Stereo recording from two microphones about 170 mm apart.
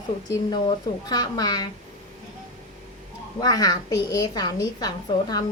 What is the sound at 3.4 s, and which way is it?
Speech, 25° left (ahead or behind).